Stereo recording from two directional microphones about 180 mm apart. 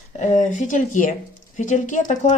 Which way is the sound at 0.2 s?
40° left (ahead or behind).